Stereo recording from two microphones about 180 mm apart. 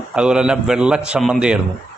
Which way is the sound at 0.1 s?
5° right (ahead or behind).